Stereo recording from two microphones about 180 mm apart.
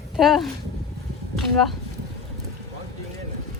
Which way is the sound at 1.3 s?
Centre (ahead or behind).